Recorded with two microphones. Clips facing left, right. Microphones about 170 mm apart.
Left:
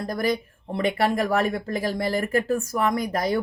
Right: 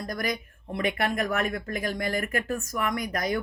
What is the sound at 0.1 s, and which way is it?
Speech, 30° left (ahead or behind).